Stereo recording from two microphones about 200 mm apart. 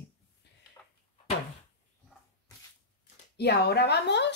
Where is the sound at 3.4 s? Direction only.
55° left (ahead or behind).